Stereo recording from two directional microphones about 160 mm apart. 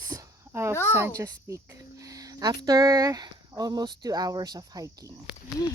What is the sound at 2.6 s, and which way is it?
Speech, 20° right (ahead or behind).